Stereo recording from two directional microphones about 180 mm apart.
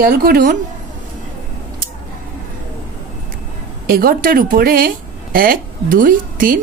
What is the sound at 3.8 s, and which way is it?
A woman's voice, 55° right (ahead or behind).